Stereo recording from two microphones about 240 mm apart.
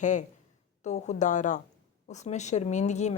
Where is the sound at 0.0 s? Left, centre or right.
Left.